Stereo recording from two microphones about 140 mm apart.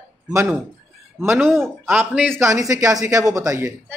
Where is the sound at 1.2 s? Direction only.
15° right (ahead or behind).